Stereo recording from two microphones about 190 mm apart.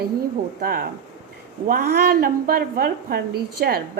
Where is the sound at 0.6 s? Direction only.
50° right (ahead or behind).